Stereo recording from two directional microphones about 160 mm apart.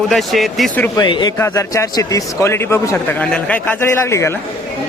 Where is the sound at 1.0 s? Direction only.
30° left (ahead or behind).